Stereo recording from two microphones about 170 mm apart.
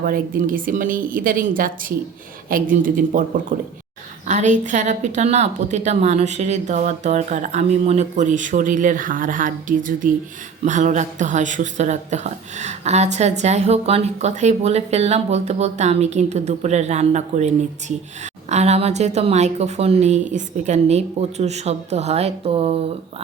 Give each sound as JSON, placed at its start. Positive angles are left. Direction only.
{"t": 0.0, "sound": "a woman's voice", "side_deg": -55}